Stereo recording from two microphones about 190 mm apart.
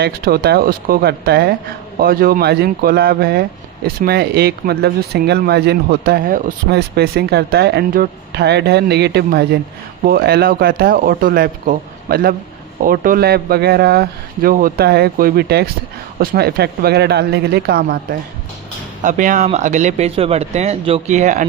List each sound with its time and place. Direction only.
0.0 s speech: 55° right (ahead or behind); by 21.4 s 40° right (ahead or behind)